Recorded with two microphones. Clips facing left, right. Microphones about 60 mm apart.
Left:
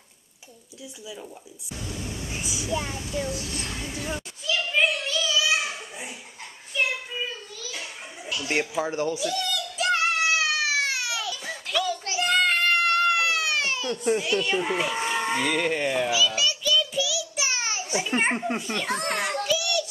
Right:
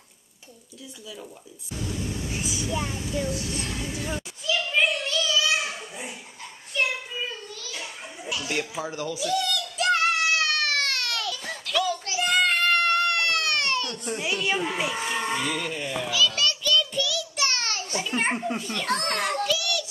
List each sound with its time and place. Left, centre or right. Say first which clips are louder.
1.8 s a child's voice: right 3 dB; centre
3.9 s children playing: right 1 dB; centre
6.7 s child singing: even; centre
8.5 s speech: left 6 dB; left
9.2 s a sound: right 2 dB; centre
11.7 s children playing: right 1 dB; centre
12.2 s baby cry: even; centre
14.2 s a child's voice: left 1 dB; centre
15.0 s a sound: left 2 dB; centre
15.3 s music: left 4 dB; left
16.1 s a sound: even; centre
18.7 s a child's voice: even; centre
19.4 s child singing: left 1 dB; centre